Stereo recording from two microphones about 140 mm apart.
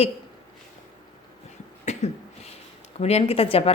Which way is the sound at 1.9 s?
55° left (ahead or behind).